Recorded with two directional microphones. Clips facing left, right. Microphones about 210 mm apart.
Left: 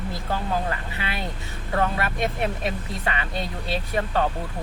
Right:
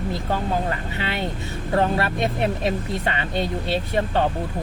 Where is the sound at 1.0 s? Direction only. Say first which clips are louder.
Right 5 dB; 25° right (ahead or behind).